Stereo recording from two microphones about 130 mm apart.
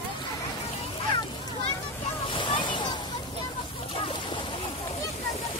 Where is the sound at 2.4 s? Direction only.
40° left (ahead or behind).